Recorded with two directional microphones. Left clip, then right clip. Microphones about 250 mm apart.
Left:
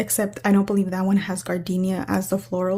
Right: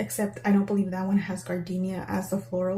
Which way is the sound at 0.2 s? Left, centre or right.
Left.